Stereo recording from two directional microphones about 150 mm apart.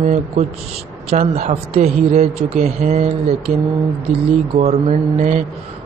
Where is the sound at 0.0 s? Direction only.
50° right (ahead or behind).